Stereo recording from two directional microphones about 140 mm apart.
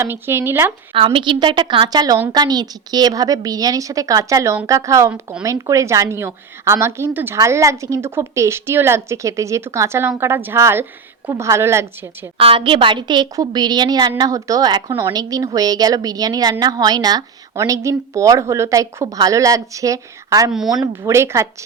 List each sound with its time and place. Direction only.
0.0 s speech: 15° right (ahead or behind)
0.9 s a woman's voice: 40° right (ahead or behind); by 12.3 s 20° right (ahead or behind)
12.4 s a woman's voice: 40° right (ahead or behind); by 20.5 s 25° right (ahead or behind)
20.5 s speech: 5° right (ahead or behind)
21.1 s a woman's voice: 20° right (ahead or behind)